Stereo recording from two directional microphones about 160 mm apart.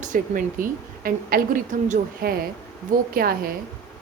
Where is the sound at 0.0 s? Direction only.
55° right (ahead or behind).